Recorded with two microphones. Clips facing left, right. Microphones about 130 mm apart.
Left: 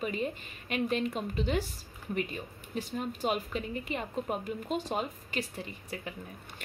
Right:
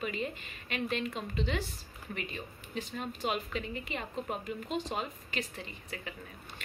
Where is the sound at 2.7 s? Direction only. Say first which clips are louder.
Left 3 dB; 45° left (ahead or behind).